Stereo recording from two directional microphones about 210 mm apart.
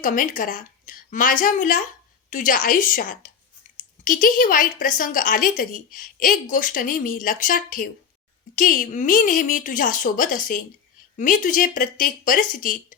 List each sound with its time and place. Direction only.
0.0 s a woman's voice: 40° left (ahead or behind)